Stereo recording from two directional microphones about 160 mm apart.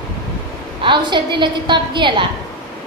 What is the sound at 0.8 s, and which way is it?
A woman's voice, 30° right (ahead or behind).